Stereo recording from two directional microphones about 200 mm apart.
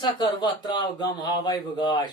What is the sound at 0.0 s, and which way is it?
A man's voice, 20° left (ahead or behind).